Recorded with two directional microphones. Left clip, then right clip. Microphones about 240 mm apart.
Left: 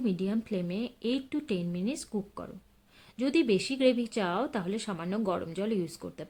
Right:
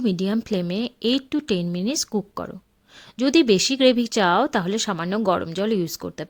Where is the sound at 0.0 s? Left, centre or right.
Right.